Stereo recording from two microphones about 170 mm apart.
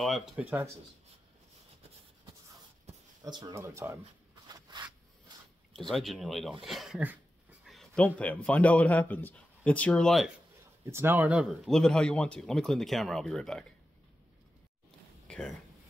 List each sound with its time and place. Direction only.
0.0 s speech: centre (ahead or behind)
3.3 s speech: 25° right (ahead or behind)
4.5 s a sound: 25° right (ahead or behind)
5.8 s a man's voice: centre (ahead or behind)
10.9 s speech: 15° right (ahead or behind); by 13.7 s 5° left (ahead or behind)
15.2 s a sound: 5° left (ahead or behind)